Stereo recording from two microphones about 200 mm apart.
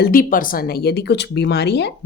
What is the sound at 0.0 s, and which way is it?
A woman's voice, 45° left (ahead or behind).